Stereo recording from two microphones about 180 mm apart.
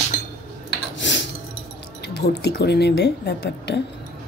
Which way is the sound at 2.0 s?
65° left (ahead or behind).